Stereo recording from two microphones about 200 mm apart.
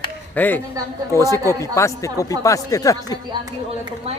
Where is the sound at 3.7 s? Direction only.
30° right (ahead or behind).